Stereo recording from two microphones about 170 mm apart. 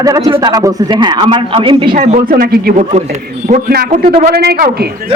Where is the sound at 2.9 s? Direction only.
40° right (ahead or behind).